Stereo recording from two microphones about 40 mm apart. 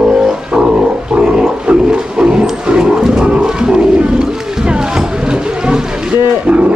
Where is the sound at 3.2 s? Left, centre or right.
Centre.